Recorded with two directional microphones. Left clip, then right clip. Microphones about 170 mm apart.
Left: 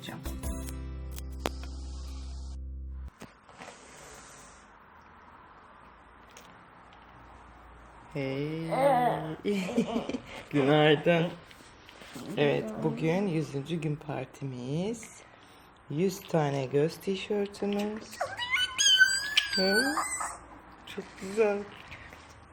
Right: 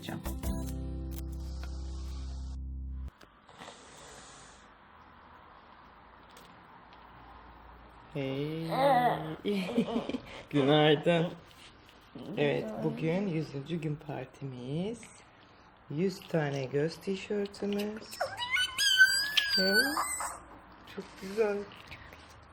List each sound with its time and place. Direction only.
8.1 s speech: centre (ahead or behind)
12.3 s speech: 20° left (ahead or behind)
17.7 s a sound: 5° right (ahead or behind)
19.7 s speech: 10° right (ahead or behind)
21.3 s speech: 25° left (ahead or behind)